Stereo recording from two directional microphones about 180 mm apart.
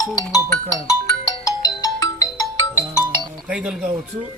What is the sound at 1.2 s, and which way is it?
Ringtone, 20° left (ahead or behind).